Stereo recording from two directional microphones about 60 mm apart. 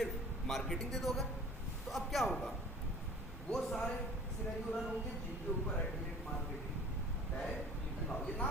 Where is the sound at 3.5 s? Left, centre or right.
Centre.